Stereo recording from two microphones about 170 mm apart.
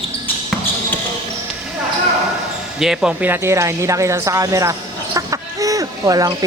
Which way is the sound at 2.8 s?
5° right (ahead or behind).